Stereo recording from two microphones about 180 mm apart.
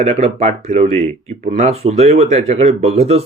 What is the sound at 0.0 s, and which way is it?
Speech, 40° right (ahead or behind).